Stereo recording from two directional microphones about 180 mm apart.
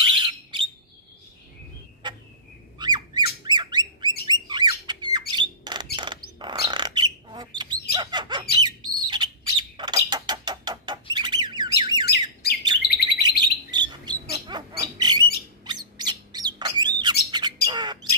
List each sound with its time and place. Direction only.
0.0 s alarm: 25° right (ahead or behind)
2.8 s squawk: 25° right (ahead or behind)
3.4 s bird: 25° right (ahead or behind)
5.3 s a sound: 25° right (ahead or behind)
5.9 s bird: 25° right (ahead or behind)
12.4 s bird: 60° left (ahead or behind)
13.2 s bird: 25° right (ahead or behind)